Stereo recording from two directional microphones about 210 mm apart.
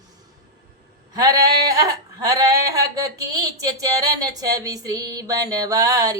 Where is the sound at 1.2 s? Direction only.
15° right (ahead or behind).